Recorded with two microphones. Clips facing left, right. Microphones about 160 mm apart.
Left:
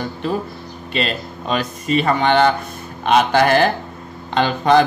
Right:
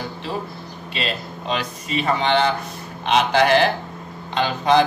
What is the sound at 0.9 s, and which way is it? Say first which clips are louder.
Speech: left 5 dB; 50° left (ahead or behind).